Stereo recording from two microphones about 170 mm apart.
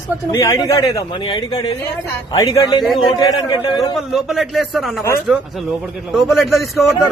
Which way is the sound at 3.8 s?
Centre (ahead or behind).